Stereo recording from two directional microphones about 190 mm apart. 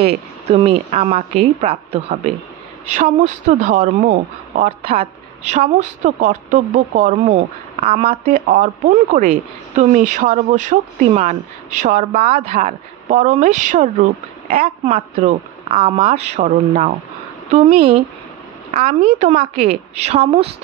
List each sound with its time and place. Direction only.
0.0 s speech: 35° right (ahead or behind)